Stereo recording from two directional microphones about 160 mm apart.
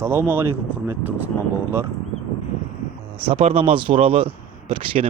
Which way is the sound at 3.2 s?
35° right (ahead or behind).